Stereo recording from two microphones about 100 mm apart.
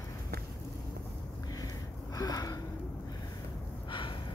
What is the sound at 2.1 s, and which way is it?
Gasp, 40° left (ahead or behind).